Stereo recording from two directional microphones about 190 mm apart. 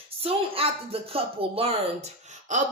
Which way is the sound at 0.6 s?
30° right (ahead or behind).